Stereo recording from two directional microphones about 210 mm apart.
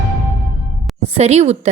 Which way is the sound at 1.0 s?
30° right (ahead or behind).